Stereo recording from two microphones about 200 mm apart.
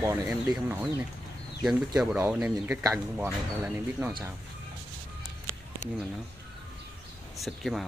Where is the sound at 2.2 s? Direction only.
5° right (ahead or behind).